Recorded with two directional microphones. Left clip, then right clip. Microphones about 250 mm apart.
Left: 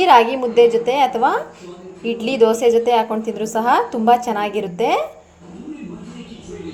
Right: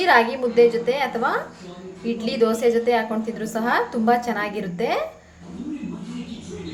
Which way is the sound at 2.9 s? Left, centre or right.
Centre.